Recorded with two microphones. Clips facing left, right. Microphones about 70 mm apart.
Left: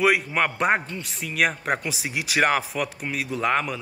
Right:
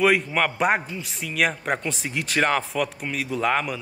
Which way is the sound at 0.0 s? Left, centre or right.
Centre.